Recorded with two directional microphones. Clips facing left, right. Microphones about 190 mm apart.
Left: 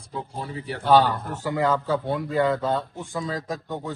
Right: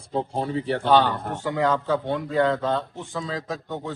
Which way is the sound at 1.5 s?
5° left (ahead or behind).